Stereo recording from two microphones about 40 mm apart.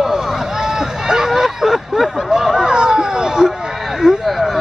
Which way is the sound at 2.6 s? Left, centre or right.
Centre.